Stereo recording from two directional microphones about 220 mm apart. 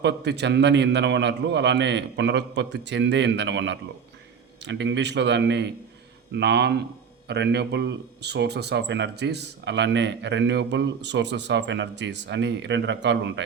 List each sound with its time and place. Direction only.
0.0 s speech: 50° right (ahead or behind)